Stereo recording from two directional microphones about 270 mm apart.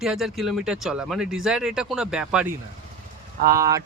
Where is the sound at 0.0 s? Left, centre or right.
Centre.